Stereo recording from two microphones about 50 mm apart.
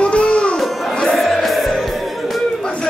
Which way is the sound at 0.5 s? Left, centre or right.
Centre.